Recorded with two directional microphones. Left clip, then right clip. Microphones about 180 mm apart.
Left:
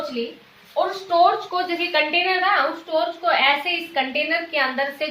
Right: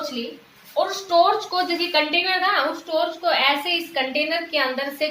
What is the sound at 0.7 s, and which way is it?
A woman's voice, 25° right (ahead or behind).